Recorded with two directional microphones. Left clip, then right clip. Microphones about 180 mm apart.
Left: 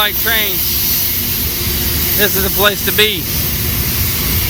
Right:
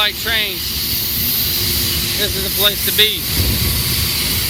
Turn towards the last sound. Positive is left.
turn(degrees=15)  # may be behind; listen again after turning